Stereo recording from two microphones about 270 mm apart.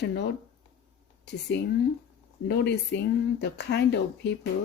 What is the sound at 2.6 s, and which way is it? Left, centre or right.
Speech, left.